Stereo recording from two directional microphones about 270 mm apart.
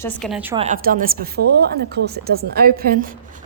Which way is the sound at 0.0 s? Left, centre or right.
Centre.